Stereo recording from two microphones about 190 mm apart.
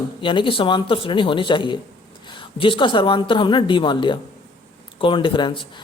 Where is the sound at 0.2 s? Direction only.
25° left (ahead or behind).